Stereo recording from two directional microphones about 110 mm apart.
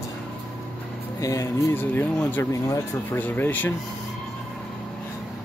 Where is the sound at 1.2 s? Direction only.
30° left (ahead or behind).